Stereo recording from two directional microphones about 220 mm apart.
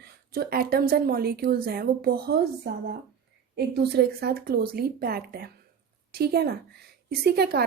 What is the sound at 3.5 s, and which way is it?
A woman's voice, 45° right (ahead or behind).